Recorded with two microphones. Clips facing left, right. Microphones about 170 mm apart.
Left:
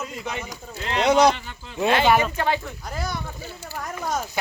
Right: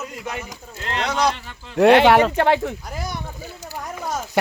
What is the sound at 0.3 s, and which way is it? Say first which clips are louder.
Speech: right 1 dB; centre (ahead or behind).